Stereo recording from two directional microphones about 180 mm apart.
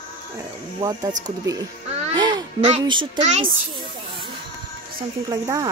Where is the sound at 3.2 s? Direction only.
40° right (ahead or behind).